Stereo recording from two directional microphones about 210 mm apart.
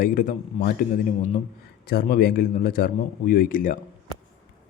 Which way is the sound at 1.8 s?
45° left (ahead or behind).